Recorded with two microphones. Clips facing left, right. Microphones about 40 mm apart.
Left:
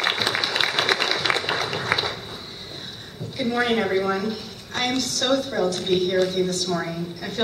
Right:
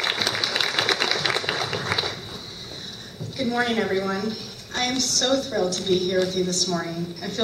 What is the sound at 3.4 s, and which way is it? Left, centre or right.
A woman's voice, centre.